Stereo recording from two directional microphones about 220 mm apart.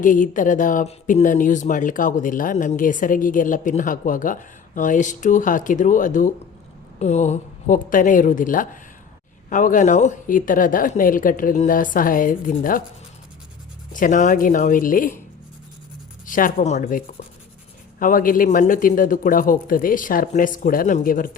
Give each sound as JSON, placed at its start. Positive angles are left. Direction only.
{"t": 0.0, "sound": "speech", "side_deg": 35}
{"t": 13.9, "sound": "speech", "side_deg": 35}
{"t": 16.2, "sound": "speech", "side_deg": 40}
{"t": 18.0, "sound": "speech", "side_deg": 40}